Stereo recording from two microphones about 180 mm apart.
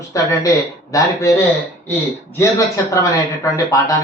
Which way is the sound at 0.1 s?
20° left (ahead or behind).